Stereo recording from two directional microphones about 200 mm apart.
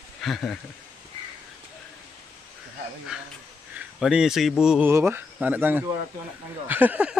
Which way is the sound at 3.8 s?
5° right (ahead or behind).